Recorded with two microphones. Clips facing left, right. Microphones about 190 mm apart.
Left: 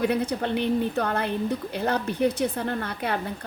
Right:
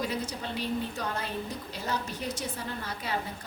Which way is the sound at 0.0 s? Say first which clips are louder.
Left 9 dB; 60° left (ahead or behind).